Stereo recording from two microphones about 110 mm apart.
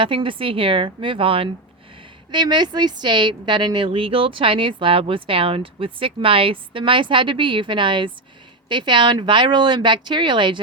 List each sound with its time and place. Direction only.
0.0 s speech: 50° right (ahead or behind)
2.3 s speech: 45° right (ahead or behind)